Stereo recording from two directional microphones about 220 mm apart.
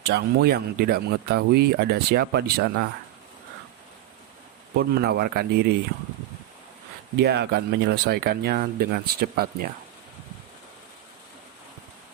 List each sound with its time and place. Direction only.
0.1 s speech: 45° right (ahead or behind)
4.8 s speech: 45° right (ahead or behind)
7.2 s speech: 50° right (ahead or behind)